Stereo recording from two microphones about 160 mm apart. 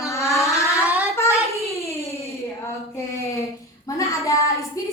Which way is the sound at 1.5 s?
20° left (ahead or behind).